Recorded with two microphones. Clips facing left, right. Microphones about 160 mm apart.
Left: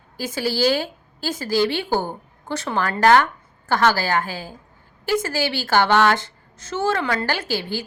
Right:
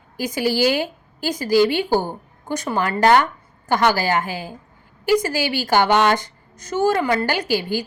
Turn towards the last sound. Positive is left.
turn(degrees=-15)  # may be behind; listen again after turning